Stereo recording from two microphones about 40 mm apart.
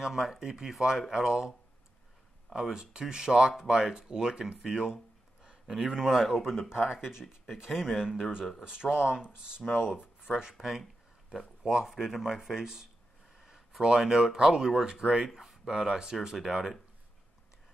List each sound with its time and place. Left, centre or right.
0.0 s speech: centre
2.7 s speech: centre
5.4 s a sound: centre
5.9 s speech: centre